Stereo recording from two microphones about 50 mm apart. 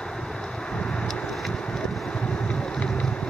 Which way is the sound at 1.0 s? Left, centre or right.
Centre.